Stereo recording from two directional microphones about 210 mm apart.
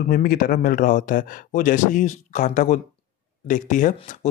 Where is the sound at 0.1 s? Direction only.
40° left (ahead or behind).